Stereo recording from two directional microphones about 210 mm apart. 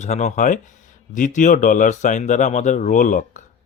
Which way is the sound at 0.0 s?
35° left (ahead or behind).